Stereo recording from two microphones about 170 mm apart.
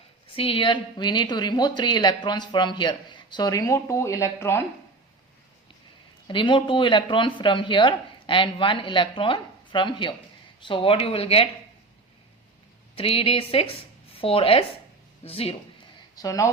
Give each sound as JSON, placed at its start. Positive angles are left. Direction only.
{"t": 0.3, "sound": "a woman's voice", "side_deg": 30}
{"t": 6.2, "sound": "a woman's voice", "side_deg": 30}
{"t": 13.0, "sound": "speech", "side_deg": 35}
{"t": 16.1, "sound": "a woman's voice", "side_deg": 20}